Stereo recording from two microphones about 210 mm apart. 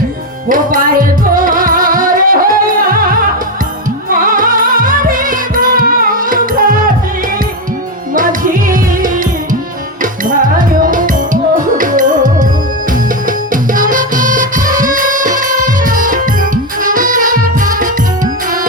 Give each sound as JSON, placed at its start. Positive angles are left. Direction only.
{"t": 0.4, "sound": "music", "side_deg": -40}
{"t": 4.2, "sound": "music", "side_deg": -40}
{"t": 8.1, "sound": "music", "side_deg": -40}